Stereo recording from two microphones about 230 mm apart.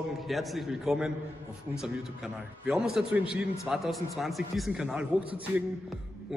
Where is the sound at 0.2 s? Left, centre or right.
Centre.